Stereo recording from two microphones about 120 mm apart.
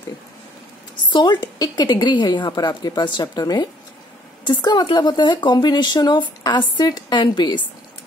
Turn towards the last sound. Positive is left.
turn(degrees=40)  # may be behind; listen again after turning